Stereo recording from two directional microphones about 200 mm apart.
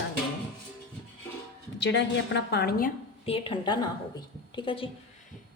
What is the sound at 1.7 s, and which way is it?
A woman's voice, 60° left (ahead or behind).